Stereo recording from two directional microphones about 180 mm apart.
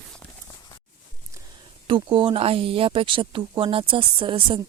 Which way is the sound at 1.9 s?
25° right (ahead or behind).